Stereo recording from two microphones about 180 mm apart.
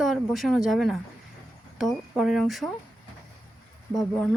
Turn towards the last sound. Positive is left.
turn(degrees=0)  # may be behind; listen again after turning